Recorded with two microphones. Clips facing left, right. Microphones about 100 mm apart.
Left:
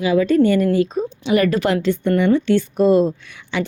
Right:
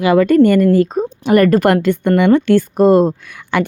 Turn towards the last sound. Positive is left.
turn(degrees=-55)  # may be behind; listen again after turning